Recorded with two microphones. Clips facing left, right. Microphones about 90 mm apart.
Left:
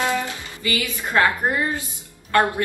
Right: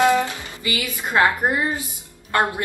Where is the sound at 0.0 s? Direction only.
20° right (ahead or behind).